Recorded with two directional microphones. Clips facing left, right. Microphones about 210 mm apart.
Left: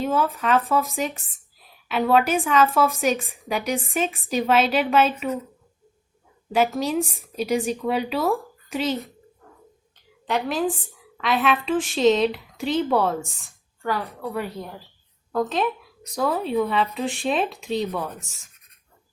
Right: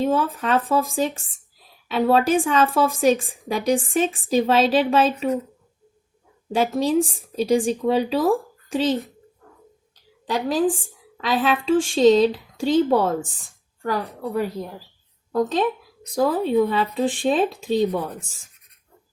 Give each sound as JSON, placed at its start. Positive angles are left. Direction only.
{"t": 0.0, "sound": "a woman's voice", "side_deg": -35}
{"t": 6.5, "sound": "a woman's voice", "side_deg": -30}
{"t": 9.9, "sound": "a woman's voice", "side_deg": -35}
{"t": 16.1, "sound": "a woman's voice", "side_deg": -35}